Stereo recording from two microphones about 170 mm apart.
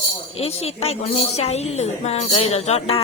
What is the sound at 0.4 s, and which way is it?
Speech, 35° left (ahead or behind).